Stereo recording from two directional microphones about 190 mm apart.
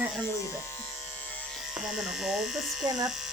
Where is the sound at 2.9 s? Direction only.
20° right (ahead or behind).